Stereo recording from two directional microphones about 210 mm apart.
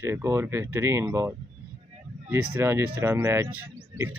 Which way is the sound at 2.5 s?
10° right (ahead or behind).